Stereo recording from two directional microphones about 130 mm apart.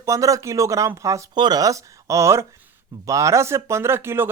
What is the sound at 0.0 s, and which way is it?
Speech, 25° right (ahead or behind).